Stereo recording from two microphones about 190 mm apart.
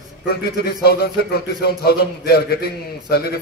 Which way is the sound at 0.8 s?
55° left (ahead or behind).